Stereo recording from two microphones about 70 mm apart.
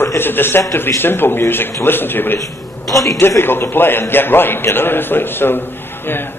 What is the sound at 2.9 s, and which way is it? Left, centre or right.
Speech, left.